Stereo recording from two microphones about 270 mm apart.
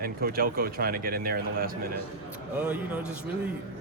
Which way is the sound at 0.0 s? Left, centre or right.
Right.